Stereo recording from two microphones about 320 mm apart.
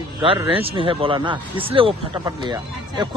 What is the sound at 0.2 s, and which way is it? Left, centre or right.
Speech, centre.